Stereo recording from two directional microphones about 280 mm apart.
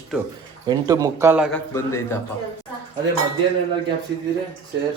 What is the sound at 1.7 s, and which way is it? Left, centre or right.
Speech, centre.